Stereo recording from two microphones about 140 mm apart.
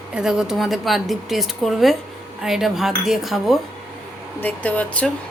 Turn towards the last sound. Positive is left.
turn(degrees=10)  # may be behind; listen again after turning